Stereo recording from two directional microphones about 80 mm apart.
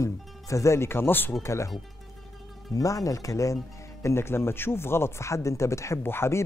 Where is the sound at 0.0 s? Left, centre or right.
Left.